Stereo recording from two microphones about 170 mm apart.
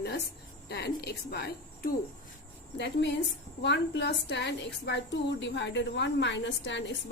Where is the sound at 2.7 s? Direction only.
90° left.